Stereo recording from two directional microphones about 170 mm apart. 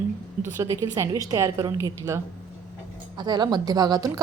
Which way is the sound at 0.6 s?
20° right (ahead or behind).